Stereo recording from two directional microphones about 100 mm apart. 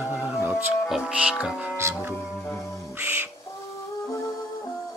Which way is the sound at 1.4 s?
15° right (ahead or behind).